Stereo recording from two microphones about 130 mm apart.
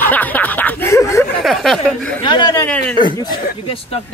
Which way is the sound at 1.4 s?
Centre (ahead or behind).